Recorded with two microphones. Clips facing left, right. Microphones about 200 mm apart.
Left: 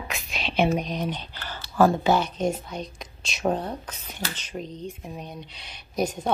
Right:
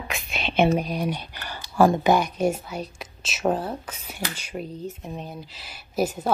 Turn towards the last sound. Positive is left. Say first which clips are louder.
# right 2 dB
turn(degrees=-5)  # may be behind; listen again after turning